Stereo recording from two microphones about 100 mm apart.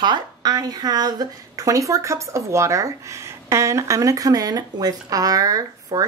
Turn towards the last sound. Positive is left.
turn(degrees=-35)  # may be behind; listen again after turning